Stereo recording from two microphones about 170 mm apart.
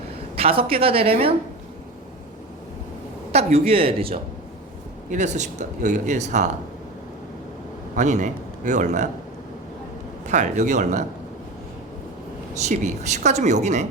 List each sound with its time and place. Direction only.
0.3 s a woman's voice: 35° right (ahead or behind)
3.3 s a woman's voice: 35° right (ahead or behind)
5.1 s speech: 45° right (ahead or behind)
7.9 s a man's voice: 45° right (ahead or behind)
10.2 s speech: 45° right (ahead or behind)
12.5 s speech: 40° right (ahead or behind)